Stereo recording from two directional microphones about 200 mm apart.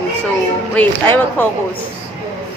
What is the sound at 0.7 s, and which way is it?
Speech, 10° left (ahead or behind).